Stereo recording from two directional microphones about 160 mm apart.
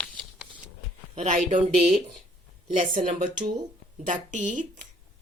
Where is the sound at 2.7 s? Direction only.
55° right (ahead or behind).